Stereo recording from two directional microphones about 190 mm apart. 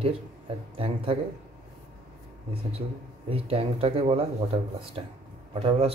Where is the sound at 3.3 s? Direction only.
30° right (ahead or behind).